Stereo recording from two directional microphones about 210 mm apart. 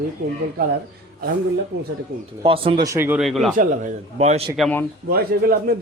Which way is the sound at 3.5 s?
40° right (ahead or behind).